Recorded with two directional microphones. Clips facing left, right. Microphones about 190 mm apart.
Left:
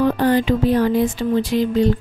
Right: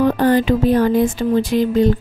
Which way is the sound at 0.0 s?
50° right (ahead or behind).